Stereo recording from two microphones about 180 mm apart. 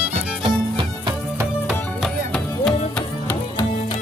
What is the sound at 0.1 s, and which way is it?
Music, 30° right (ahead or behind).